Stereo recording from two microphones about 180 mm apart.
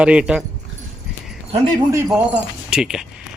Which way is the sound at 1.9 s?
15° right (ahead or behind).